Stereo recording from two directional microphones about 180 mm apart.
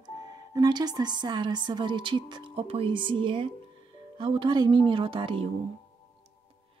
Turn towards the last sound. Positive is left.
turn(degrees=-30)  # may be behind; listen again after turning